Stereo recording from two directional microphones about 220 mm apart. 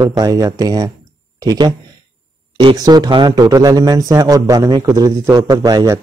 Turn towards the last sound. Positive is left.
turn(degrees=-15)  # may be behind; listen again after turning